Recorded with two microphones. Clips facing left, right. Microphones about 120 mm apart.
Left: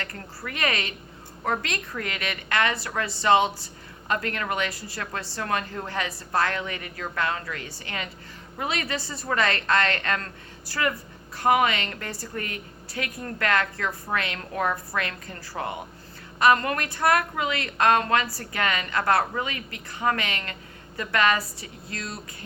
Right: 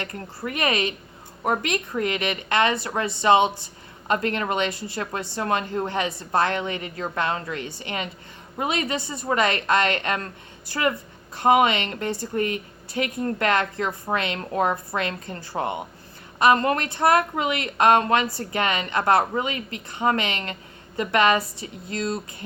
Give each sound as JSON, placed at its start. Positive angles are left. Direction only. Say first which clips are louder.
{"t": 0.0, "sound": "speech", "louder": "right 5 dB", "side_deg": -20}